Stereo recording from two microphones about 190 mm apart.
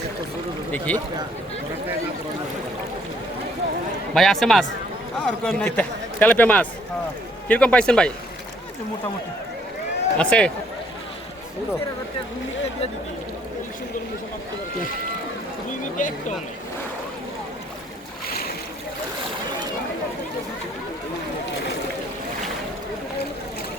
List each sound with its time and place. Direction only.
0.9 s a man's voice: 10° left (ahead or behind)
4.1 s a man's voice: centre (ahead or behind)
10.2 s speech: 5° left (ahead or behind)
16.0 s speech: 45° left (ahead or behind)
18.3 s boat: 50° left (ahead or behind)